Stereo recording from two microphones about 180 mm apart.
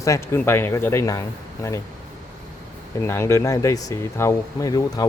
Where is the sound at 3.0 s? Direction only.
15° left (ahead or behind).